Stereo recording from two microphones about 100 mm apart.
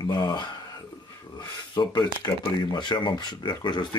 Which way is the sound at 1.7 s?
45° left (ahead or behind).